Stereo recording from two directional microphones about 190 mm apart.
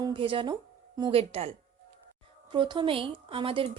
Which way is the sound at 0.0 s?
25° right (ahead or behind).